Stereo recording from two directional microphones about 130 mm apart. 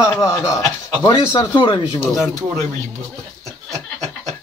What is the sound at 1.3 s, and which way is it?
Speech, 40° left (ahead or behind).